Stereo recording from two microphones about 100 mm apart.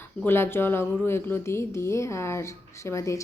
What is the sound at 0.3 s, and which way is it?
A woman's voice, 25° left (ahead or behind).